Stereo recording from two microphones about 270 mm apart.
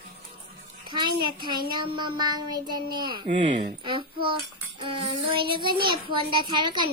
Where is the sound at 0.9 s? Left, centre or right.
Centre.